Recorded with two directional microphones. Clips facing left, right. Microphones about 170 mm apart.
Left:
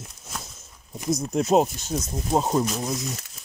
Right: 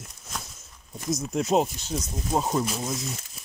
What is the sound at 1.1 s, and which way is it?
Speech, 40° left (ahead or behind).